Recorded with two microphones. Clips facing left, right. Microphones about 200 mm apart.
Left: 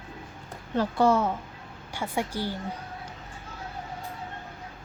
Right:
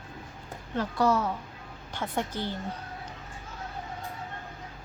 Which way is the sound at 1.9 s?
10° left (ahead or behind).